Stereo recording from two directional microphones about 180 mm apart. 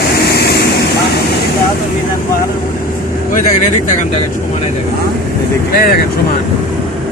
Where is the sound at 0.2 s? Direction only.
65° left (ahead or behind).